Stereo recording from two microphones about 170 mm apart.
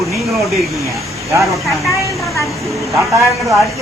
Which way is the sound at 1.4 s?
Centre (ahead or behind).